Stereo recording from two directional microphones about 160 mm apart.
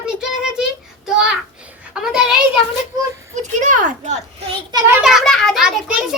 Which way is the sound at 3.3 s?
50° right (ahead or behind).